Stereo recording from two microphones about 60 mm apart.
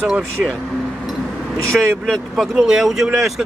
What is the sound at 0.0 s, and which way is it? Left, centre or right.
Speech, centre.